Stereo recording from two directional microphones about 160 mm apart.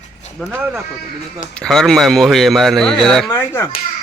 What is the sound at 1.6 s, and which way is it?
Speech, centre (ahead or behind).